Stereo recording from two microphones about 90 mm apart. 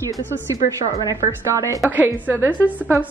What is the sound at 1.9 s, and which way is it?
Speech, 20° right (ahead or behind).